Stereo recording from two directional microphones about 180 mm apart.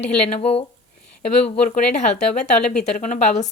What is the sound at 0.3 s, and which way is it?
Speech, 35° left (ahead or behind).